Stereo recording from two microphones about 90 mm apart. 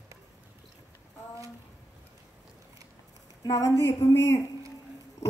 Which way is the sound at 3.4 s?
40° left (ahead or behind).